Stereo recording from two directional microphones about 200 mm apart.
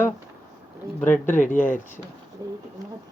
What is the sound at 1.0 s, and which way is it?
Speech, 10° left (ahead or behind).